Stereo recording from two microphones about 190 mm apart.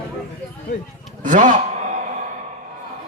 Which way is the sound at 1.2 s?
40° right (ahead or behind).